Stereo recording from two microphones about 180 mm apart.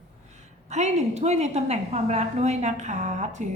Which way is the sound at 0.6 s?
40° right (ahead or behind).